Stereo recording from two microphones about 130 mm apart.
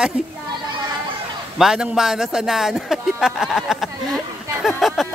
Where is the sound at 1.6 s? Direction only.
5° right (ahead or behind).